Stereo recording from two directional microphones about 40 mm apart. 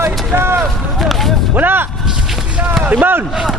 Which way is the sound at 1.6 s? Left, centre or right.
Right.